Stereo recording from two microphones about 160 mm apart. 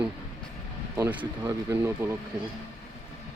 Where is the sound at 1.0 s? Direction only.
15° right (ahead or behind).